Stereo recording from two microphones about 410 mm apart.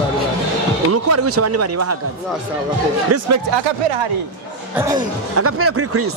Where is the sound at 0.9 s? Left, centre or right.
Right.